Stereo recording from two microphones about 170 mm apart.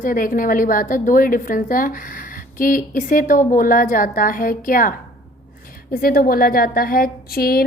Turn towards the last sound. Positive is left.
turn(degrees=60)  # may be behind; listen again after turning